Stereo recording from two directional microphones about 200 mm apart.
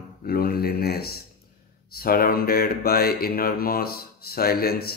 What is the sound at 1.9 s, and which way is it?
Speech, 50° left (ahead or behind).